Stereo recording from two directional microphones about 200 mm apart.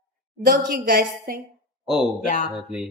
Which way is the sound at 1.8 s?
5° right (ahead or behind).